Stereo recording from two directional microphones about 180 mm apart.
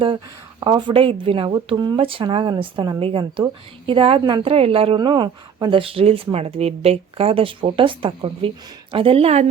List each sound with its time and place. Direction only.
0.6 s speech: 25° right (ahead or behind)